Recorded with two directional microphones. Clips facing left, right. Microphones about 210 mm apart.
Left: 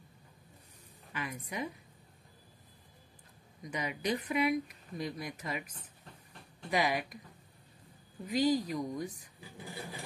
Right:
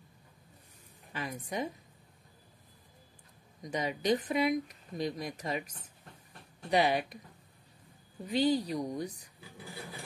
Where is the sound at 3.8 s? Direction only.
35° right (ahead or behind).